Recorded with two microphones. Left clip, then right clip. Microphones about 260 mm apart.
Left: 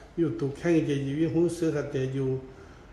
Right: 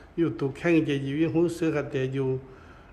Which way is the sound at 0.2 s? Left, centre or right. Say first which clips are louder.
Right 2 dB; centre.